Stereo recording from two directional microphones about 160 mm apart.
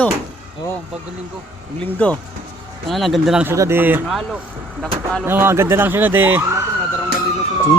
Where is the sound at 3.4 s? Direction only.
15° right (ahead or behind).